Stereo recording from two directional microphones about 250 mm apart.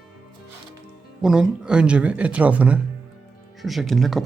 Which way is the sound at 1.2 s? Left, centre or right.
Centre.